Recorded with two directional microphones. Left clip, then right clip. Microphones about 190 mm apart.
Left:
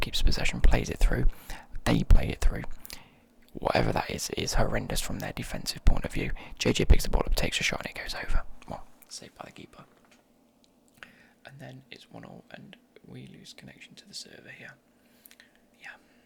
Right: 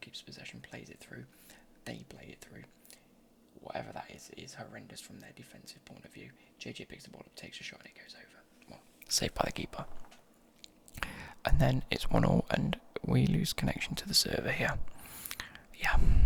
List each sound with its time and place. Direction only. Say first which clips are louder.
0.0 s a sound: left 16 dB; 40° left (ahead or behind)
3.6 s speech: left 15 dB; 35° left (ahead or behind)
9.0 s speech: right 15 dB; 25° right (ahead or behind)
10.9 s speech: right 9 dB; 30° right (ahead or behind)
15.3 s whispering: right 12 dB; 40° right (ahead or behind)